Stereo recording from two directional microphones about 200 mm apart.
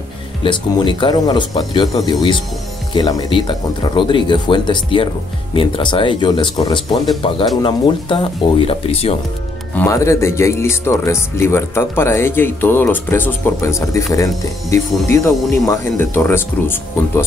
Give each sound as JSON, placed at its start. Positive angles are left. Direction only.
{"t": 0.4, "sound": "speech", "side_deg": 25}
{"t": 9.8, "sound": "speech", "side_deg": 15}